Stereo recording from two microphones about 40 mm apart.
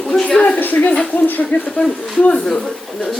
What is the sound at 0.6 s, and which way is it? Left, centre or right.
A woman's voice, left.